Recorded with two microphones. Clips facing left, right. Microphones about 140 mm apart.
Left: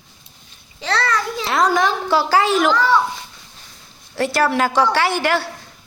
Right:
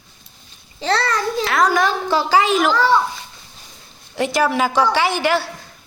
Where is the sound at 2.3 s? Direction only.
15° right (ahead or behind).